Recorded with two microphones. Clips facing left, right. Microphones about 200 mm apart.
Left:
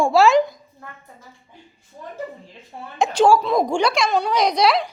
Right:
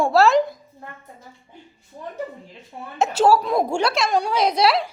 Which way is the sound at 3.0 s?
5° right (ahead or behind).